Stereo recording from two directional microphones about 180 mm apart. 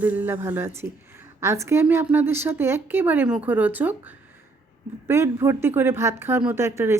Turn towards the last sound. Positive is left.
turn(degrees=-15)  # may be behind; listen again after turning